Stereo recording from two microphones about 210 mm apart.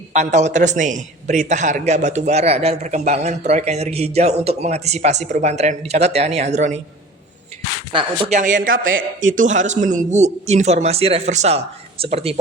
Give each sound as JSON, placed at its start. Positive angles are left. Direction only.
{"t": 0.1, "sound": "a man's voice", "side_deg": -35}
{"t": 7.9, "sound": "speech", "side_deg": -25}
{"t": 8.4, "sound": "a man's voice", "side_deg": -40}
{"t": 8.7, "sound": "a man's voice", "side_deg": -70}
{"t": 9.2, "sound": "a man's voice", "side_deg": -40}